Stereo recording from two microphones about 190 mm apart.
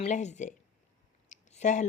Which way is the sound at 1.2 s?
40° left (ahead or behind).